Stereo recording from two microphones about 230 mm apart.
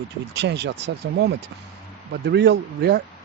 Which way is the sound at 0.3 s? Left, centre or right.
Right.